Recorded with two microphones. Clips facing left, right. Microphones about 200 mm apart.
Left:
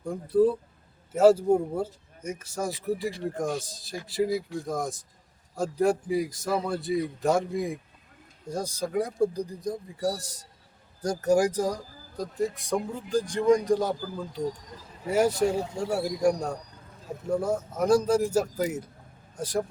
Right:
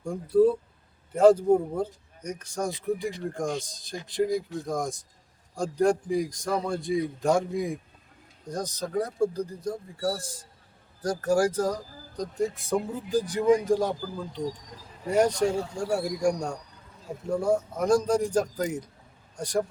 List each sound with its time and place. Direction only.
0.0 s speech: centre (ahead or behind)
15.6 s speech: 20° left (ahead or behind)
15.9 s speech: centre (ahead or behind)